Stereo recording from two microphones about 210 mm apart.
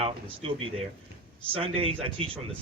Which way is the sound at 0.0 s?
25° right (ahead or behind).